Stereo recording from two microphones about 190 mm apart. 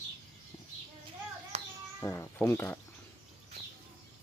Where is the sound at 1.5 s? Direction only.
35° right (ahead or behind).